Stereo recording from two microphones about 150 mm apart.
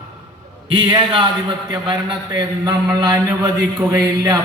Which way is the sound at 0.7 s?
35° right (ahead or behind).